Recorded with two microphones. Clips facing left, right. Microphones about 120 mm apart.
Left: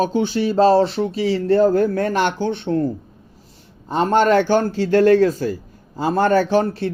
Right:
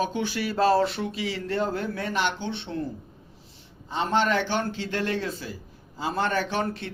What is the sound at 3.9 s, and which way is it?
A man's voice, 45° left (ahead or behind).